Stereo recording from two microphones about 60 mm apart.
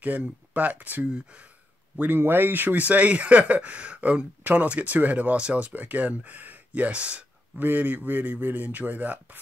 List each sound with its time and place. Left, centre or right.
0.0 s speech: right
2.0 s speech: right